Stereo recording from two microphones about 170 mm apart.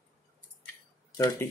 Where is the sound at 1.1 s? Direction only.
20° left (ahead or behind).